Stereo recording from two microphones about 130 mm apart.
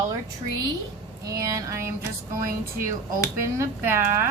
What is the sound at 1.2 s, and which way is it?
Speech, 25° right (ahead or behind).